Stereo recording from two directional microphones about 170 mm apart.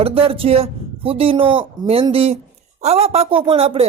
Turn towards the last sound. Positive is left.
turn(degrees=-35)  # may be behind; listen again after turning